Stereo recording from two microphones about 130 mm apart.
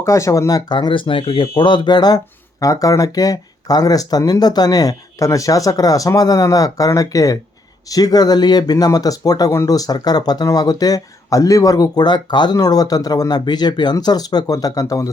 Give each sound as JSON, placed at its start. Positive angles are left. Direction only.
{"t": 0.0, "sound": "speech", "side_deg": 25}